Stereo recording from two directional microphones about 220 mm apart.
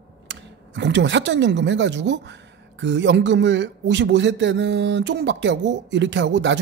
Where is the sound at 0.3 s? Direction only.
55° right (ahead or behind).